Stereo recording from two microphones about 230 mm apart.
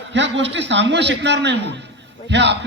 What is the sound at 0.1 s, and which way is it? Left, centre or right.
A man's voice, right.